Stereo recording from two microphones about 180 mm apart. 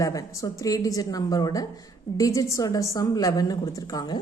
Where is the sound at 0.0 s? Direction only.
20° left (ahead or behind).